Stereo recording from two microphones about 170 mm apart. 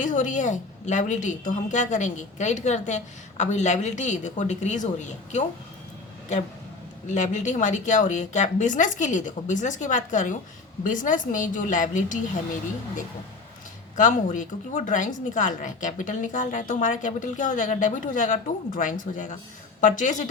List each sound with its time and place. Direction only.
0.0 s a woman's voice: 50° left (ahead or behind)
7.1 s a woman's voice: 45° left (ahead or behind)
13.9 s a woman's voice: 50° left (ahead or behind)